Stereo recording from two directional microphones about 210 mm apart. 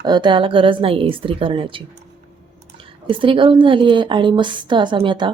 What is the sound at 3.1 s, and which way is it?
A woman's voice, 25° right (ahead or behind).